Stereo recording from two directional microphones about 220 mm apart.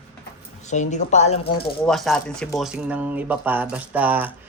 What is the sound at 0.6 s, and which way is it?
Speech, 30° left (ahead or behind).